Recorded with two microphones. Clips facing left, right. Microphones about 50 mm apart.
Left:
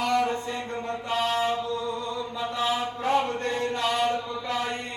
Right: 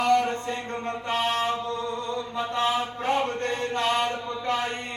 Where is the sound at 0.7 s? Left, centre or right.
Right.